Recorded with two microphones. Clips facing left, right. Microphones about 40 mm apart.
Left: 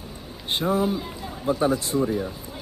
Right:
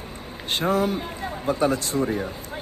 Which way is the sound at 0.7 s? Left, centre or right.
Right.